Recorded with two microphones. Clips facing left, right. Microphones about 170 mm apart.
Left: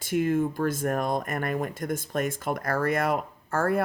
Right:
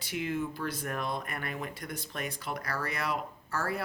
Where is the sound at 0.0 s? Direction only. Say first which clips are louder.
Left 9 dB; 50° left (ahead or behind).